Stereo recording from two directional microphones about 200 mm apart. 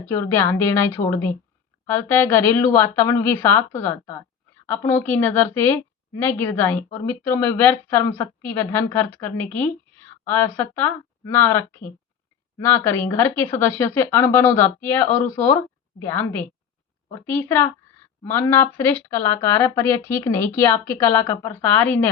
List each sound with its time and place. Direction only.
0.0 s a woman's voice: 15° left (ahead or behind)